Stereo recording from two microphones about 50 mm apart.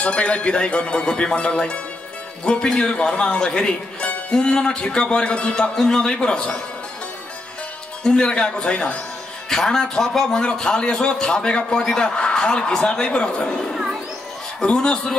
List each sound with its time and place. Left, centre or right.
0.0 s a man's voice: left
8.0 s a man's voice: centre